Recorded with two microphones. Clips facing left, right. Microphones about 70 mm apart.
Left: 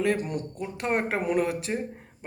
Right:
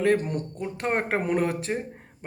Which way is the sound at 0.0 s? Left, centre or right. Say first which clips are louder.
Right 3 dB; right.